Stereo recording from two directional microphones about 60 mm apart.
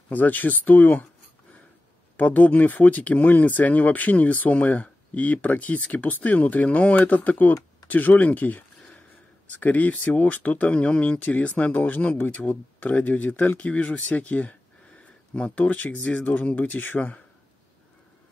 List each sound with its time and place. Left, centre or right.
0.1 s speech: left
2.1 s speech: left